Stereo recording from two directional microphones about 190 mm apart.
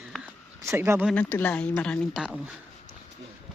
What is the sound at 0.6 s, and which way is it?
Speech, 15° right (ahead or behind).